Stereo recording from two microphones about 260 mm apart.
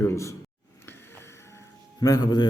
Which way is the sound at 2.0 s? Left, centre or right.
Centre.